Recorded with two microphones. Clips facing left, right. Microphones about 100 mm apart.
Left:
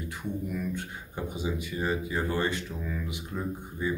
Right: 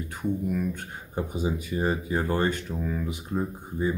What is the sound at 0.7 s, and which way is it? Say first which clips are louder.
Speech: right 3 dB; 40° right (ahead or behind).